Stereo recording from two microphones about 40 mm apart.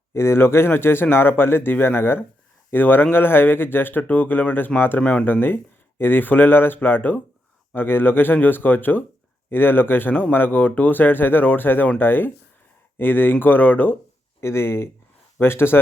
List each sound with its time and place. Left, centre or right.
0.1 s speech: left
2.7 s speech: left
4.0 s speech: left
4.9 s speech: left
5.2 s speech: left
9.5 s speech: left
14.4 s speech: left